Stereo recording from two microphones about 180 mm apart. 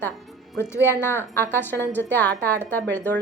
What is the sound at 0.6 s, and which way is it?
A woman's voice, 15° left (ahead or behind).